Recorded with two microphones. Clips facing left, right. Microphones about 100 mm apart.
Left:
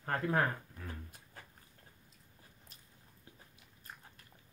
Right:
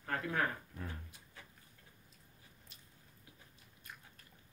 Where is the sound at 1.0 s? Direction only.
45° left (ahead or behind).